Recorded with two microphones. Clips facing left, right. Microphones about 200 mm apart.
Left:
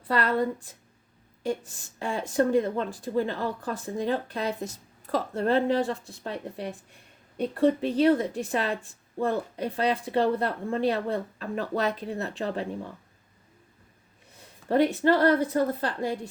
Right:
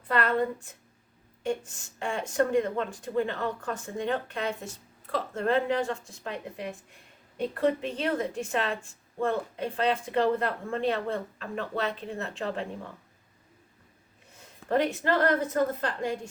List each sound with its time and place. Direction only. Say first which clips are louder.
0.1 s speech: left 1 dB; 35° left (ahead or behind)
14.7 s speech: left 4 dB; 35° left (ahead or behind)